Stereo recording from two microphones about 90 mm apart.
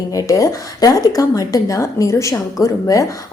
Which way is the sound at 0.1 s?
40° left (ahead or behind).